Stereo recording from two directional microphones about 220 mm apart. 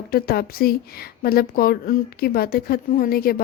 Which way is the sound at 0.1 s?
45° left (ahead or behind).